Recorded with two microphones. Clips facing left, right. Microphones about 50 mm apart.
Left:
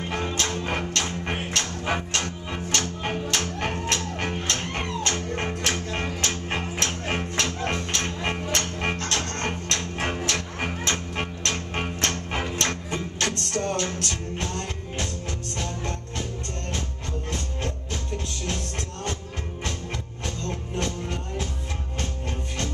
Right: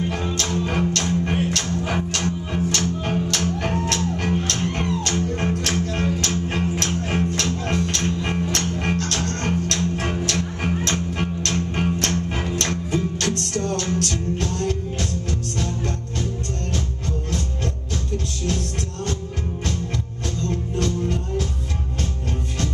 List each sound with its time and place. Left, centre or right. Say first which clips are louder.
0.1 s music: right 2 dB; centre
20.4 s music: right 6 dB; left